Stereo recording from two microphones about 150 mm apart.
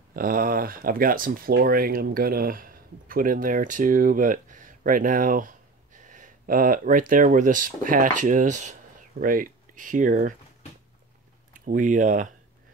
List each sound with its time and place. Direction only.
0.1 s speech: 70° right (ahead or behind); by 8.7 s 55° right (ahead or behind)
9.2 s speech: 70° right (ahead or behind)
11.5 s speech: 60° right (ahead or behind)